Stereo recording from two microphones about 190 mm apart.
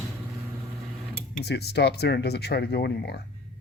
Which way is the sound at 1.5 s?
60° left (ahead or behind).